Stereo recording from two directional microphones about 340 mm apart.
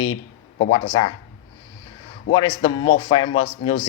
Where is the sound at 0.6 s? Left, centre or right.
Centre.